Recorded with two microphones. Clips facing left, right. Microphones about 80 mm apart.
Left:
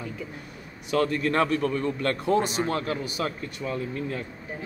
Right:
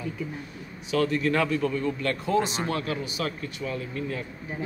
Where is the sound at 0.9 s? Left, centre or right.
Left.